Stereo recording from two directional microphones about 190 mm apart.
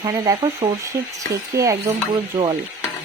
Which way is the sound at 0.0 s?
20° right (ahead or behind).